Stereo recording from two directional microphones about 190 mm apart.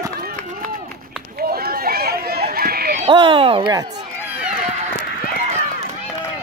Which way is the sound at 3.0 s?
25° right (ahead or behind).